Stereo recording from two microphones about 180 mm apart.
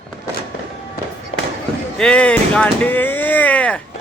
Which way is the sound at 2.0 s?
5° left (ahead or behind).